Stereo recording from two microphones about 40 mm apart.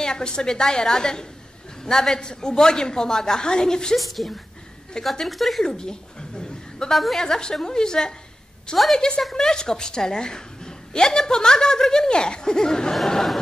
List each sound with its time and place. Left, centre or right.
0.0 s a woman's voice: centre
3.9 s speech: centre
5.6 s a sound: centre
6.9 s speech: centre
7.2 s a woman's voice: centre
12.9 s speech: centre